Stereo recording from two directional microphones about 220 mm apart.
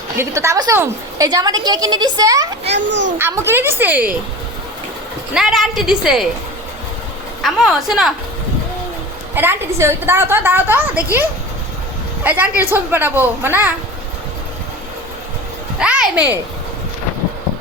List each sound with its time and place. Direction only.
0.2 s a woman's voice: 15° right (ahead or behind)
2.7 s a child's voice: 50° right (ahead or behind)
3.2 s a woman's voice: 10° right (ahead or behind)
5.3 s a woman's voice: centre (ahead or behind)
7.4 s a woman's voice: centre (ahead or behind)
9.3 s a woman's voice: 10° right (ahead or behind)
15.8 s a sound: 5° right (ahead or behind)